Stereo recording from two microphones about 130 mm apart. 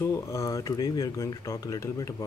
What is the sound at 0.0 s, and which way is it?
Speech, 20° left (ahead or behind).